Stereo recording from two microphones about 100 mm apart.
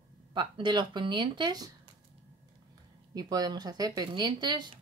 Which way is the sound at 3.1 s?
40° right (ahead or behind).